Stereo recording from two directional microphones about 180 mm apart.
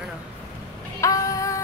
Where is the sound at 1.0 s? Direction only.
20° left (ahead or behind).